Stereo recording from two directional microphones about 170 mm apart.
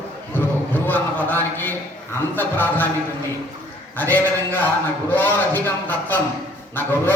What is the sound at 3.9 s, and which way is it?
A man's voice, 10° left (ahead or behind).